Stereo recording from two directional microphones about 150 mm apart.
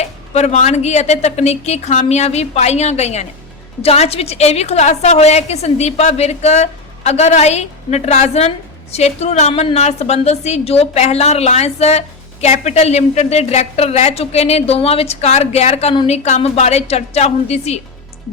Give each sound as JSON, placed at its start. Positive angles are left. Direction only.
{"t": 0.0, "sound": "a woman's voice", "side_deg": 45}